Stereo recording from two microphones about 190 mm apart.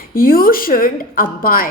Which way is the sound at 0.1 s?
50° left (ahead or behind).